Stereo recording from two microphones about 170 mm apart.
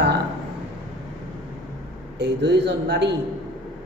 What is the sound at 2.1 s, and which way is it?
A man's voice, 90° right.